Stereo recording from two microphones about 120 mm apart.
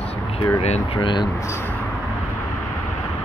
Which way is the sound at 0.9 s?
40° left (ahead or behind).